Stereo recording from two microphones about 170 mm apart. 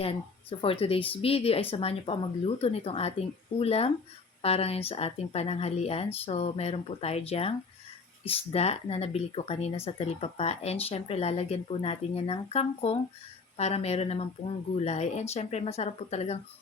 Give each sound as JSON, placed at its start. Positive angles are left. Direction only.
{"t": 0.6, "sound": "speech", "side_deg": 35}